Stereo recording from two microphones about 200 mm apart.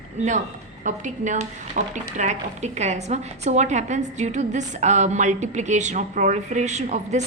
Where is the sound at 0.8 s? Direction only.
35° right (ahead or behind).